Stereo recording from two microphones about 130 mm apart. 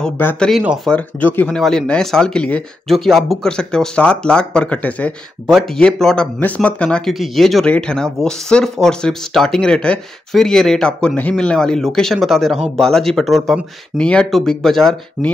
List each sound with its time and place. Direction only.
0.2 s speech: 15° left (ahead or behind)
0.5 s speech: 5° right (ahead or behind)
0.8 s speech: 10° left (ahead or behind)